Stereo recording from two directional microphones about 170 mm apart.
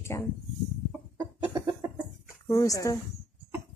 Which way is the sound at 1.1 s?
20° right (ahead or behind).